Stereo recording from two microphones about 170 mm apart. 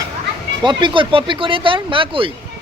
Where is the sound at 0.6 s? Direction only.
25° right (ahead or behind).